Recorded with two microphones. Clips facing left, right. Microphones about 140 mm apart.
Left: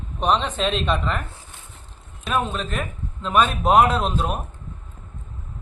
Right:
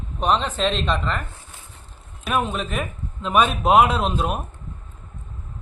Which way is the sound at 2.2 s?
10° right (ahead or behind).